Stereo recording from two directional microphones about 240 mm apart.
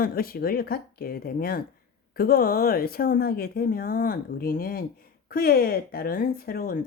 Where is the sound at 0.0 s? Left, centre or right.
Left.